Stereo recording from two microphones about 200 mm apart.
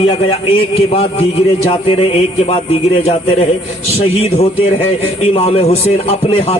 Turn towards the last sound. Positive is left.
turn(degrees=30)  # may be behind; listen again after turning